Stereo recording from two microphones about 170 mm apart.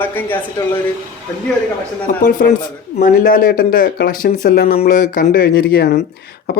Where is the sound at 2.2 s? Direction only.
50° left (ahead or behind).